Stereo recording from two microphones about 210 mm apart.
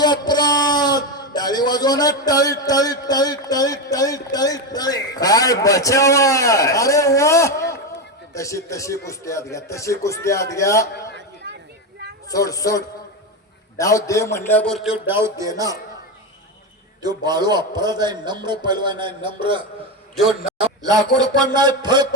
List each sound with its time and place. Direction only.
0.0 s a man's voice: 20° left (ahead or behind)
12.3 s a man's voice: 15° left (ahead or behind)
15.0 s a man's voice: 10° right (ahead or behind)
17.0 s a man's voice: 20° right (ahead or behind)